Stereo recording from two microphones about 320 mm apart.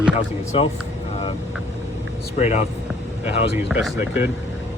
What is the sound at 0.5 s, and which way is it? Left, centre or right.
Speech, centre.